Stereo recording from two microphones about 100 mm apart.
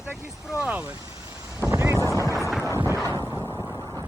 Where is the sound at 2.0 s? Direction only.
30° left (ahead or behind).